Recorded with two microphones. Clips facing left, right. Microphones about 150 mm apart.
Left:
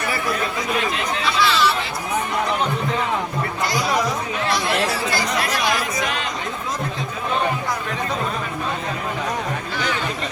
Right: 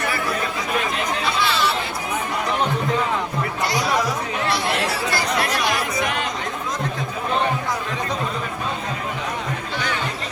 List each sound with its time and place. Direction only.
1.4 s chatter: 50° right (ahead or behind)